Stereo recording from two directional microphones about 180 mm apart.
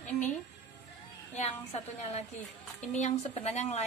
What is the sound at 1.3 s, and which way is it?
Speech, 35° left (ahead or behind).